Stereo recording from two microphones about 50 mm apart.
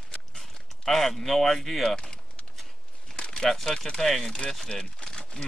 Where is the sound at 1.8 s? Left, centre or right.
Centre.